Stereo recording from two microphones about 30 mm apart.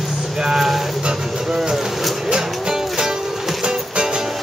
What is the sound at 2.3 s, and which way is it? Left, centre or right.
Music, centre.